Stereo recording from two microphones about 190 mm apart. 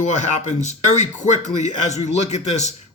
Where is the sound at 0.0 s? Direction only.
40° left (ahead or behind).